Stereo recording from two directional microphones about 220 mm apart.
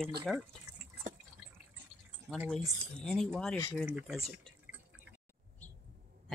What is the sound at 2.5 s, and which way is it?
Speech, centre (ahead or behind).